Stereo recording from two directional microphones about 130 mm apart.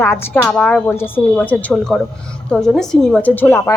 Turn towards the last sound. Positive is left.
turn(degrees=20)  # may be behind; listen again after turning